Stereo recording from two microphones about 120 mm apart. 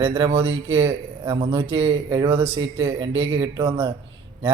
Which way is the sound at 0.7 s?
20° right (ahead or behind).